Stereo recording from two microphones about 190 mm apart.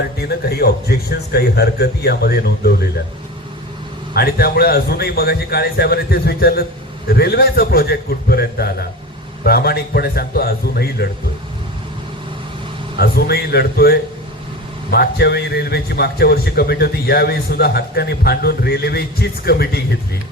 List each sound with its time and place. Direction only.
0.2 s a man's voice: 55° left (ahead or behind)
4.1 s a man's voice: 55° left (ahead or behind)
13.0 s a man's voice: 55° left (ahead or behind)